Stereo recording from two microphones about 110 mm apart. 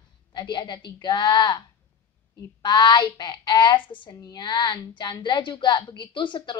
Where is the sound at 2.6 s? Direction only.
40° left (ahead or behind).